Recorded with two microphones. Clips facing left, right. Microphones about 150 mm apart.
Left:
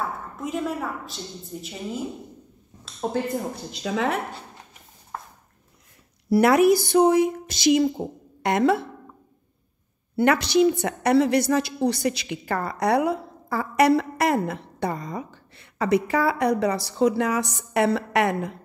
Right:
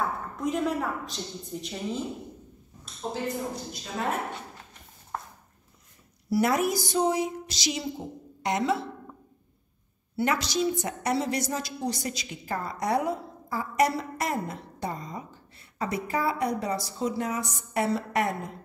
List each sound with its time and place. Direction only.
0.4 s a woman's voice: centre (ahead or behind)
2.8 s a woman's voice: 65° left (ahead or behind)
3.8 s speech: 90° left
5.1 s a sound: centre (ahead or behind)
6.3 s speech: 70° left (ahead or behind)
10.1 s a woman's voice: 65° left (ahead or behind)